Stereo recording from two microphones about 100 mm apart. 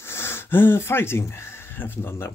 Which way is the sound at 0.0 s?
25° left (ahead or behind).